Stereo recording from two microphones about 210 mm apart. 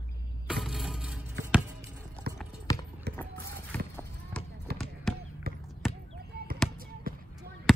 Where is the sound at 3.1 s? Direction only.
50° right (ahead or behind).